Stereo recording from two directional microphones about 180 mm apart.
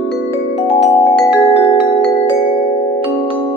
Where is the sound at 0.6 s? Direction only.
35° left (ahead or behind).